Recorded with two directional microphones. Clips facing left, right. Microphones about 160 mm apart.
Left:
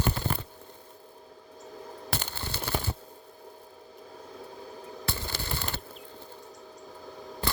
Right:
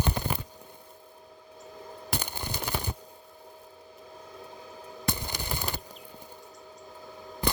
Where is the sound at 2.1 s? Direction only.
15° right (ahead or behind).